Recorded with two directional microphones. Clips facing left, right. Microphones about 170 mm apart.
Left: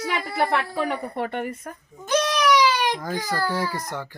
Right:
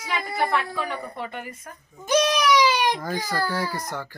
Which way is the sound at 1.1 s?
60° left (ahead or behind).